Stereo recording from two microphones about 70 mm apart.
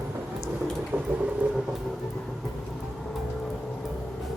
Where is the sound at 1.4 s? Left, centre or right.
Centre.